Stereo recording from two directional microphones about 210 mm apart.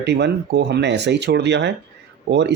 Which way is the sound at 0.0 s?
55° right (ahead or behind).